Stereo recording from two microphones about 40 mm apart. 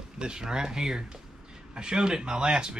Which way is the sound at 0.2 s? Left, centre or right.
Centre.